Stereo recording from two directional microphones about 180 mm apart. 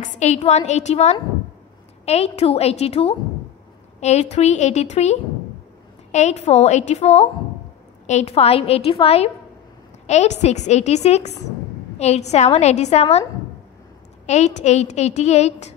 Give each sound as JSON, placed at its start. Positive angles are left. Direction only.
{"t": 0.0, "sound": "a woman's voice", "side_deg": 40}
{"t": 14.2, "sound": "a woman's voice", "side_deg": 40}